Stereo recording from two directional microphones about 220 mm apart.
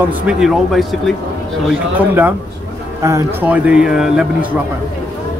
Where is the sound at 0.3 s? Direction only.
Centre (ahead or behind).